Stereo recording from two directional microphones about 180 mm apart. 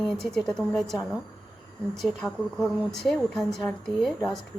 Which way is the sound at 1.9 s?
Centre (ahead or behind).